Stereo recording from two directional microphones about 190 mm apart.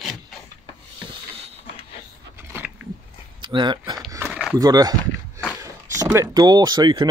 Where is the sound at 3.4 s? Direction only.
25° right (ahead or behind).